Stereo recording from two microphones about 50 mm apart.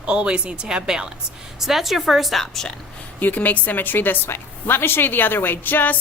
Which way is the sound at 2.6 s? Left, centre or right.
Centre.